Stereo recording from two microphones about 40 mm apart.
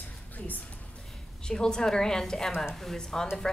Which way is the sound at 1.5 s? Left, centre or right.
Centre.